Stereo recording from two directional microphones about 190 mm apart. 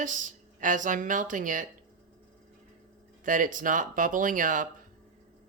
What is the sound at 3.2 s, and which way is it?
Speech, 45° right (ahead or behind).